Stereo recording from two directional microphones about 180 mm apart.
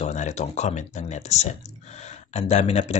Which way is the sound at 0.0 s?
40° left (ahead or behind).